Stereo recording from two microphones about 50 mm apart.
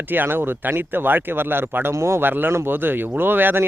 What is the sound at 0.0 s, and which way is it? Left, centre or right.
Speech, right.